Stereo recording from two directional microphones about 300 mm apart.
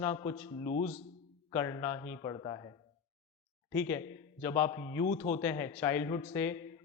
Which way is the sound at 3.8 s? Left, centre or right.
Centre.